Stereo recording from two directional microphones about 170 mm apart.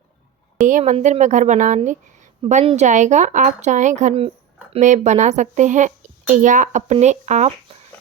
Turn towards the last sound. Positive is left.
turn(degrees=-45)  # may be behind; listen again after turning